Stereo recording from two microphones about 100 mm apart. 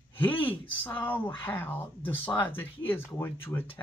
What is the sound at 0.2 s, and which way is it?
Speech, 15° left (ahead or behind).